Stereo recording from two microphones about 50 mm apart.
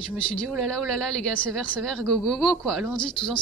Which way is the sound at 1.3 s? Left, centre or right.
Left.